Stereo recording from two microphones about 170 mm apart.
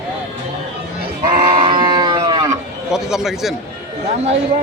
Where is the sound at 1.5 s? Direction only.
30° right (ahead or behind).